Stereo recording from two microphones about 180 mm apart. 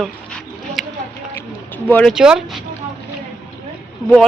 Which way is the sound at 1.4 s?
10° left (ahead or behind).